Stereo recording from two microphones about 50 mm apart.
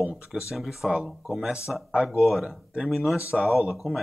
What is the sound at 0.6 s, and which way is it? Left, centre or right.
Speech, centre.